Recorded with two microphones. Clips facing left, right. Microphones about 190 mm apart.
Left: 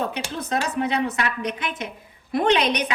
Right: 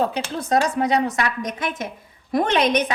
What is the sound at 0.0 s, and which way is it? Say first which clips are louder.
A woman's voice: right 4 dB; 35° right (ahead or behind).